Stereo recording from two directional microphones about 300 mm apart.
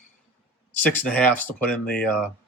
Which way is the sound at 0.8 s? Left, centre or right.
Centre.